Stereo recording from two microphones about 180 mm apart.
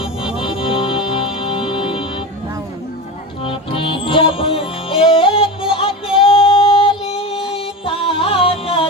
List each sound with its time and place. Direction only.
0.4 s music: 30° left (ahead or behind)
3.4 s music: 30° left (ahead or behind)
6.2 s female singing: 30° left (ahead or behind)
7.3 s music: 5° right (ahead or behind)
7.5 s music: 30° left (ahead or behind)